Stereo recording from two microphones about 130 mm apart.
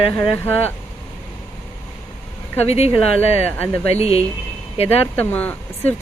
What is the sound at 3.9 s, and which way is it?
Speech, 50° left (ahead or behind).